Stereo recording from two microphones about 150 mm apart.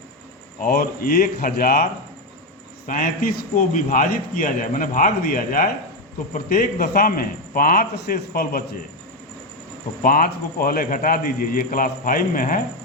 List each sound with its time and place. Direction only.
0.6 s a man's voice: 75° left (ahead or behind)
10.0 s a man's voice: 70° left (ahead or behind)